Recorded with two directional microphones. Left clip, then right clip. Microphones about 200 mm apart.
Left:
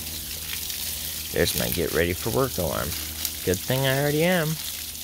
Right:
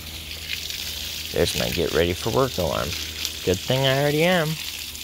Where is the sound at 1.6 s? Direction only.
5° left (ahead or behind).